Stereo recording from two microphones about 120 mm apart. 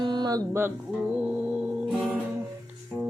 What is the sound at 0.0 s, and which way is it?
Music, 40° right (ahead or behind).